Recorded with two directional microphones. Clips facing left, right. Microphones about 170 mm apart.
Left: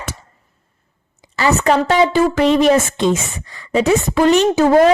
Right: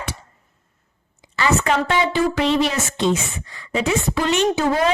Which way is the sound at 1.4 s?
40° left (ahead or behind).